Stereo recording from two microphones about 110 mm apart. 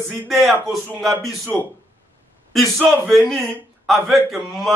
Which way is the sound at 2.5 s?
Centre (ahead or behind).